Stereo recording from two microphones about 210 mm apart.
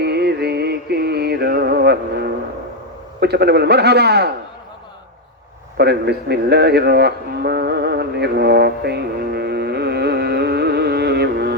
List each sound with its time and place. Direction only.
0.0 s music: 50° right (ahead or behind)
3.2 s a man's voice: 50° right (ahead or behind)
5.7 s music: 50° right (ahead or behind)